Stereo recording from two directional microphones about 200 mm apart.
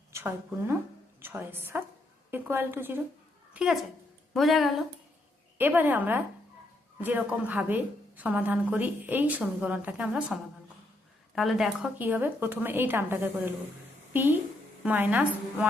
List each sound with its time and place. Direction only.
0.1 s a woman's voice: 10° right (ahead or behind)